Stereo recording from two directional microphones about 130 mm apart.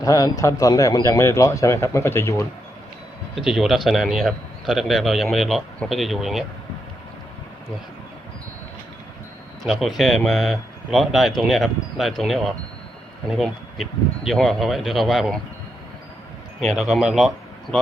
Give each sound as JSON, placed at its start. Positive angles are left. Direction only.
{"t": 0.0, "sound": "speech", "side_deg": 30}
{"t": 3.3, "sound": "a man's voice", "side_deg": -5}
{"t": 10.0, "sound": "a man's voice", "side_deg": 0}
{"t": 16.6, "sound": "speech", "side_deg": 0}